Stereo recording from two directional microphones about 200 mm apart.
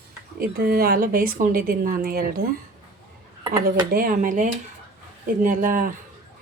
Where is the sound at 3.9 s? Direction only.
45° right (ahead or behind).